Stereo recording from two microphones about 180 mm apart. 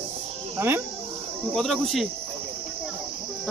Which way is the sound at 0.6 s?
15° right (ahead or behind).